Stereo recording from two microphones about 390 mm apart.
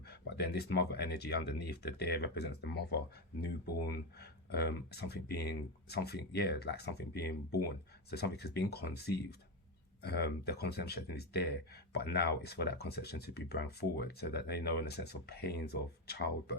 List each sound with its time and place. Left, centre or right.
0.3 s speech: left